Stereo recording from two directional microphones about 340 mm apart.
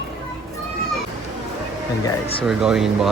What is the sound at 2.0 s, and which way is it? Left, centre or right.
Speech, centre.